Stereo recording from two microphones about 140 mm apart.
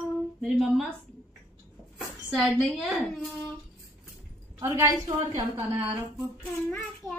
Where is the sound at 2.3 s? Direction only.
Centre (ahead or behind).